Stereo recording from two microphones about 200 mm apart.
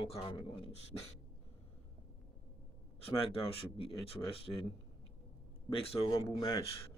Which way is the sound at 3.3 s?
25° left (ahead or behind).